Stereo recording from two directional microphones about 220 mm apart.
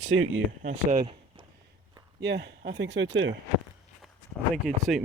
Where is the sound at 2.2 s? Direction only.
50° right (ahead or behind).